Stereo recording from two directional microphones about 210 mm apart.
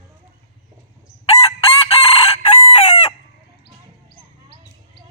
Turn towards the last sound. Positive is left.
turn(degrees=30)  # may be behind; listen again after turning